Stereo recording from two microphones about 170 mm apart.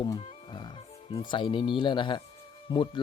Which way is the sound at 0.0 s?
30° left (ahead or behind).